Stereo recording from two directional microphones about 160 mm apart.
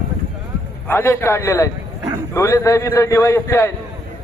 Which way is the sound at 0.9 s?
15° left (ahead or behind).